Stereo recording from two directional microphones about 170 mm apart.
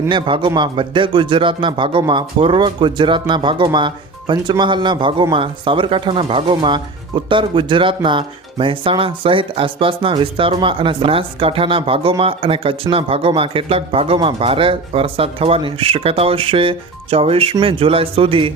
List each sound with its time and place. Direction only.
0.1 s speech: 30° right (ahead or behind)